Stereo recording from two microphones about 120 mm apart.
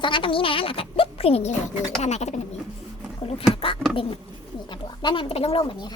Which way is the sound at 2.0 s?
70° left (ahead or behind).